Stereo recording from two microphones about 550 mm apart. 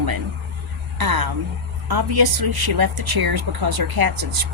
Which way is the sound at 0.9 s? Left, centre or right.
Right.